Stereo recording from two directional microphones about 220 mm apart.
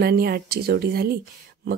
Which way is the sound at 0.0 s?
45° right (ahead or behind).